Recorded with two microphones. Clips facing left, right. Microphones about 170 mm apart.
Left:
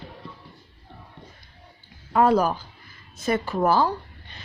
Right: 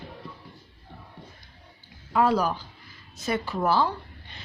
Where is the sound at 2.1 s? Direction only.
45° left (ahead or behind).